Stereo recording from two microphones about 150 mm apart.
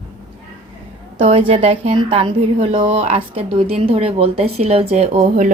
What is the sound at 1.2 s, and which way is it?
A woman's voice, 45° right (ahead or behind).